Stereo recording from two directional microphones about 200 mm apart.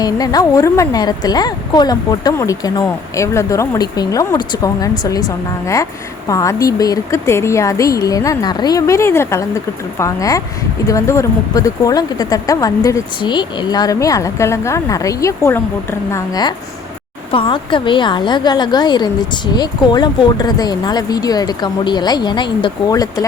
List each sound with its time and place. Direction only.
0.0 s a woman's voice: 20° left (ahead or behind)